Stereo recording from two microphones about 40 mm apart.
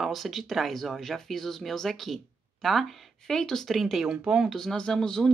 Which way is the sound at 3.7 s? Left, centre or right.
Centre.